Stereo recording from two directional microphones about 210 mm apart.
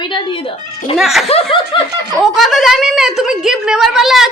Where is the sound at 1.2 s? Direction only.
30° left (ahead or behind).